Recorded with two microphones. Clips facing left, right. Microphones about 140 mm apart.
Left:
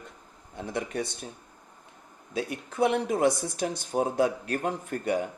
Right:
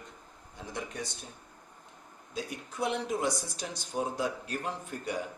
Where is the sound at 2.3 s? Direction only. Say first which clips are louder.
Left 6 dB; 60° left (ahead or behind).